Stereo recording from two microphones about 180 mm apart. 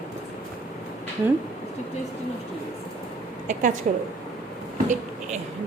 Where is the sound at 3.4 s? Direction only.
45° right (ahead or behind).